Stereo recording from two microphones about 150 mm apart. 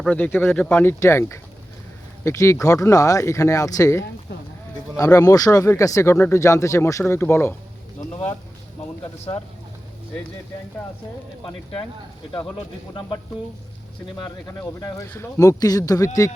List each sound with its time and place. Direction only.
0.0 s speech: 10° left (ahead or behind)
11.4 s speech: 35° left (ahead or behind)
12.9 s speech: 30° left (ahead or behind)
14.8 s speech: 25° left (ahead or behind)